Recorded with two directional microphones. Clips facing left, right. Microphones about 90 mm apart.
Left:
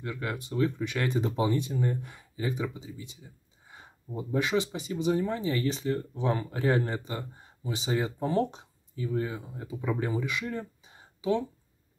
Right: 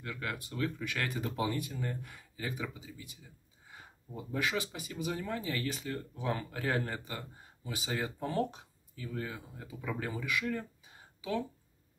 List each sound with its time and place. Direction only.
0.0 s speech: 20° left (ahead or behind)